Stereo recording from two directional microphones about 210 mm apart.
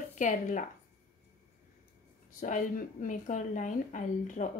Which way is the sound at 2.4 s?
40° left (ahead or behind).